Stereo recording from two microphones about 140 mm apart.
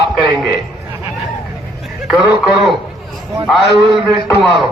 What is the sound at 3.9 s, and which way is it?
Speech, 35° right (ahead or behind).